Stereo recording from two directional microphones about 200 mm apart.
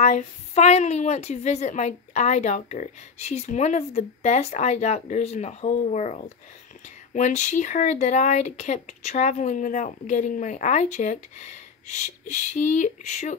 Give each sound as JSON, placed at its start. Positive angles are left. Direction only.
{"t": 0.0, "sound": "a woman's voice", "side_deg": 35}